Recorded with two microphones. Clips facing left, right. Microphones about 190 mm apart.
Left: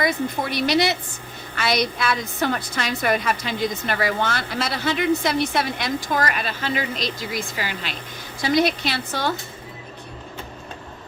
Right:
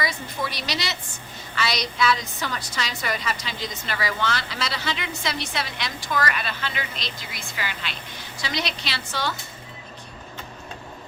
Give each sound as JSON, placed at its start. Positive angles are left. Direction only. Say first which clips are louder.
{"t": 0.0, "sound": "a woman's voice", "louder": "left 6 dB", "side_deg": 55}